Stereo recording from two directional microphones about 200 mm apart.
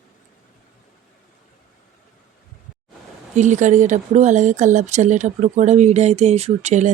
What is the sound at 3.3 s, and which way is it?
Speech, 35° right (ahead or behind).